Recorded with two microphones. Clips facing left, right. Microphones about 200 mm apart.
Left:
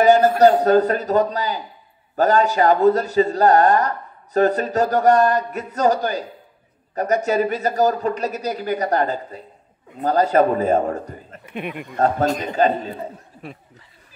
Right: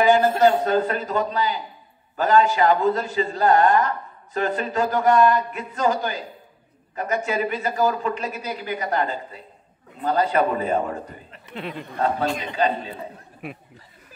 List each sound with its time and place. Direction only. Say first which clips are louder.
0.0 s a sound: left 4 dB; 40° left (ahead or behind)
0.4 s a man's voice: left 5 dB; 40° left (ahead or behind)
11.4 s speech: left 3 dB; 15° left (ahead or behind)
12.0 s a man's voice: left 4 dB; 45° left (ahead or behind)